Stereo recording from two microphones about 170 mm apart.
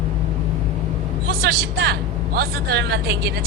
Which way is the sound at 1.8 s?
70° right (ahead or behind).